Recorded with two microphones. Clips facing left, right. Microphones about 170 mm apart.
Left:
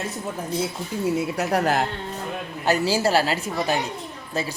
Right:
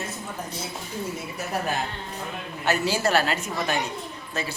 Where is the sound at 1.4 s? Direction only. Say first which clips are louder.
Left 3 dB; 85° left.